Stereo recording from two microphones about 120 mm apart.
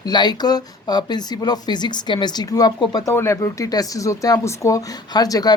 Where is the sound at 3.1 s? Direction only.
25° left (ahead or behind).